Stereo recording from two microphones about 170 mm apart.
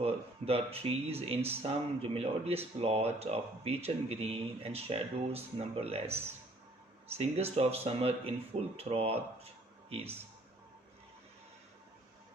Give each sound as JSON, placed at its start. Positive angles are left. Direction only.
{"t": 0.0, "sound": "speech", "side_deg": -35}
{"t": 7.2, "sound": "speech", "side_deg": -35}